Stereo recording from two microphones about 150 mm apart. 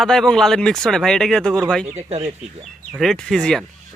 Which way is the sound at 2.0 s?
45° right (ahead or behind).